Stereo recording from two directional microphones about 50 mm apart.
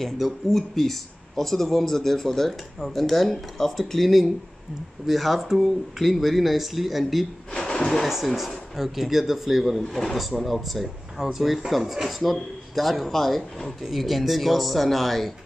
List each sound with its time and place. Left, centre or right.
0.0 s speech: centre
7.5 s a sound: centre
7.8 s speech: centre